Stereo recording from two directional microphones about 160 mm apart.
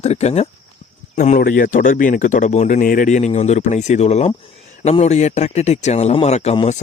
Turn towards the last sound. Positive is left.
turn(degrees=40)  # may be behind; listen again after turning